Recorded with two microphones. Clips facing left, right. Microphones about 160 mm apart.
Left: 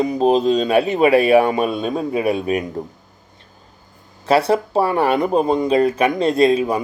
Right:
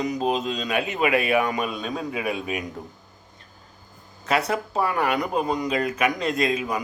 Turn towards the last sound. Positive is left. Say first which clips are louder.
# left 9 dB
turn(degrees=30)  # may be behind; listen again after turning